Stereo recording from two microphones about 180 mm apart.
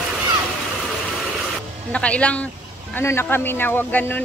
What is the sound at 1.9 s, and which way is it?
Speech, 5° left (ahead or behind).